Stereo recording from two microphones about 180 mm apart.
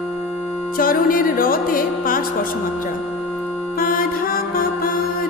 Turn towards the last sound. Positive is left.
turn(degrees=50)  # may be behind; listen again after turning